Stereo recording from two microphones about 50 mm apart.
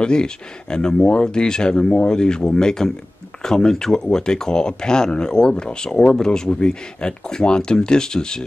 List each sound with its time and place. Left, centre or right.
0.0 s speech: centre